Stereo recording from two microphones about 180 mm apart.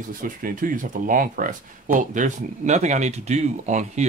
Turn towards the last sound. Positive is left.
turn(degrees=-40)  # may be behind; listen again after turning